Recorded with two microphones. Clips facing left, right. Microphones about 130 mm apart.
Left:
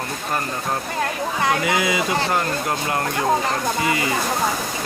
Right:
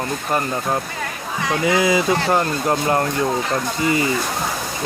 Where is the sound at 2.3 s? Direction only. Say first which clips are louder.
Right 4 dB; 30° right (ahead or behind).